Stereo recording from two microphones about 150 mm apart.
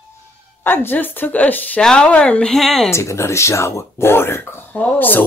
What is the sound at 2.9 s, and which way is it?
Music, 20° left (ahead or behind).